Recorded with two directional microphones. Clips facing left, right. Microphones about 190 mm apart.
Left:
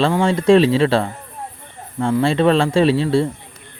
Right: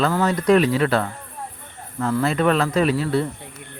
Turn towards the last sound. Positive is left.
turn(degrees=30)  # may be behind; listen again after turning